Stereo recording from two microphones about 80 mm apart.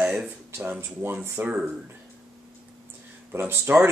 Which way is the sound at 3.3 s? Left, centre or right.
Right.